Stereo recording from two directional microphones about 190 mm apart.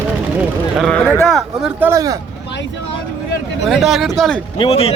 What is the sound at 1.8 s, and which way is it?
Speech, 20° right (ahead or behind).